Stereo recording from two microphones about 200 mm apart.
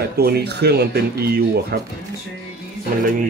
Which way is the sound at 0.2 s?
55° right (ahead or behind).